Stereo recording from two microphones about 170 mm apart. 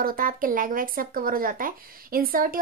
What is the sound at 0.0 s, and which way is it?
A woman's voice, 55° right (ahead or behind).